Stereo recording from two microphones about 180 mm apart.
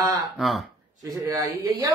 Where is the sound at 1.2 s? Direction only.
20° right (ahead or behind).